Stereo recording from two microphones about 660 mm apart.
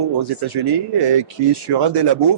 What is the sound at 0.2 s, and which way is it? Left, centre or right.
Speech, right.